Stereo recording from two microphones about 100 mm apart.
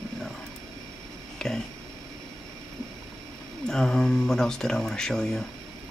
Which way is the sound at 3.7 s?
5° left (ahead or behind).